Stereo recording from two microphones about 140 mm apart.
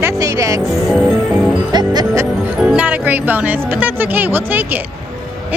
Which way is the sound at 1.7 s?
30° right (ahead or behind).